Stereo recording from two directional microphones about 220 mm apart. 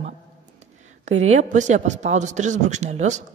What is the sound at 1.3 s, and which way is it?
A woman's voice, 35° right (ahead or behind).